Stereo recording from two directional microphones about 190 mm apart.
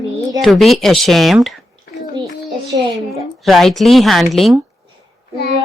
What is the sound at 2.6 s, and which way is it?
Speech, 20° right (ahead or behind).